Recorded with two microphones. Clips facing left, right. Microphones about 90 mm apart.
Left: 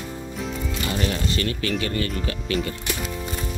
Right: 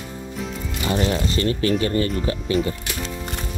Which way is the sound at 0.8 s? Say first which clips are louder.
Right 5 dB; 25° right (ahead or behind).